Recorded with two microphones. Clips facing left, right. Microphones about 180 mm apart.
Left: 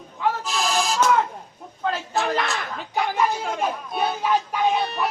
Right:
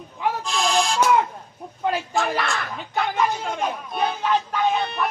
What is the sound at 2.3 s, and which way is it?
Speech, 20° left (ahead or behind).